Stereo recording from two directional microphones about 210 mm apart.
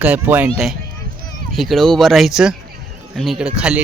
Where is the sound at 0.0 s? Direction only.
10° right (ahead or behind).